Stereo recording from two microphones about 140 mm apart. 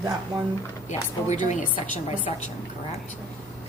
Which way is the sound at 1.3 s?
60° left (ahead or behind).